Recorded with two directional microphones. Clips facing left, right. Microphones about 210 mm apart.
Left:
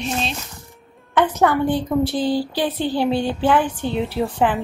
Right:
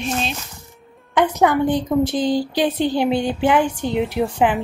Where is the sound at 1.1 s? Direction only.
15° right (ahead or behind).